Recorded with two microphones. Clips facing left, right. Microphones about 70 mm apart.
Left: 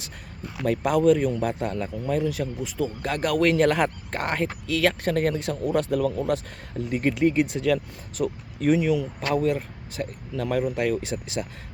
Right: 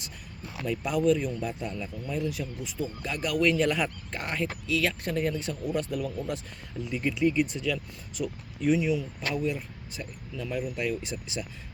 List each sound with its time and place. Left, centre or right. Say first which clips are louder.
0.6 s speech: left 6 dB; left
6.2 s speech: left 8 dB; left
6.8 s speech: left 4 dB; left